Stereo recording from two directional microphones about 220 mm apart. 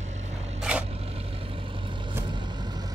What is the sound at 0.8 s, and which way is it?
Vehicle, 25° right (ahead or behind).